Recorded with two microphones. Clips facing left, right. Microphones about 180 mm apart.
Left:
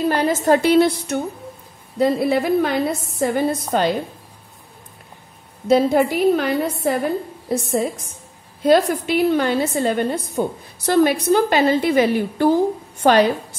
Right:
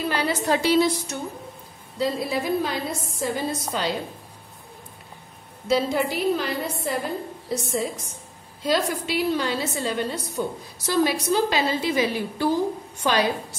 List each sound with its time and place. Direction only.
0.1 s a woman's voice: 45° left (ahead or behind)
5.7 s a woman's voice: 55° left (ahead or behind)